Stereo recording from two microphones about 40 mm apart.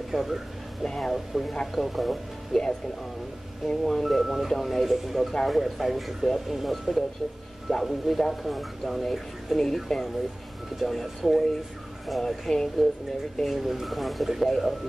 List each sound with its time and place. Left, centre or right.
0.1 s speech: centre
0.8 s speech: centre